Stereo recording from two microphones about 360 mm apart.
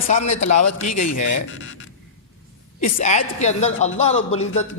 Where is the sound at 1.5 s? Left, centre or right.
Left.